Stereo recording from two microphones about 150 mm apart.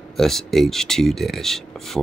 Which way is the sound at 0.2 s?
Centre (ahead or behind).